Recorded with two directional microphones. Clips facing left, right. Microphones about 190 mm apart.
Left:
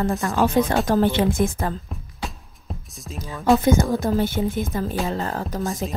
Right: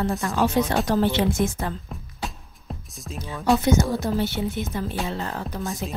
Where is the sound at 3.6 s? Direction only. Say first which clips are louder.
Left 2 dB; 50° left (ahead or behind).